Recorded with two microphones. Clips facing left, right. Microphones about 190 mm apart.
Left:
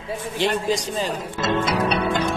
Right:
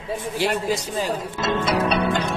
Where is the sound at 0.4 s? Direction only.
10° right (ahead or behind).